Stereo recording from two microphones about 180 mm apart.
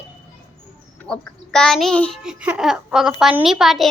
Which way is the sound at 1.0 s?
5° left (ahead or behind).